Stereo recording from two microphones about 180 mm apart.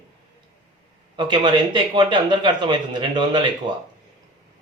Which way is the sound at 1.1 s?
25° right (ahead or behind).